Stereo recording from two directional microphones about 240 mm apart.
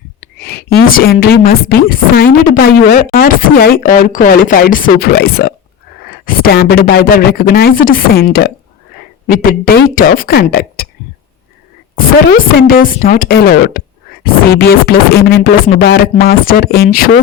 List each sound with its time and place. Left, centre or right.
0.2 s a woman's voice: left
11.9 s a woman's voice: left